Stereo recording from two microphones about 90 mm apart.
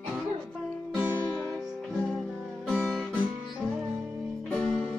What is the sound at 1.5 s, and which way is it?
Music, 5° left (ahead or behind).